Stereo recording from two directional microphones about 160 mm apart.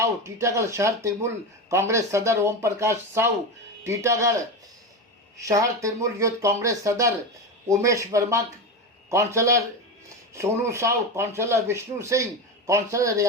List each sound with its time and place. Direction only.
0.0 s speech: 20° right (ahead or behind)
5.4 s speech: 20° right (ahead or behind)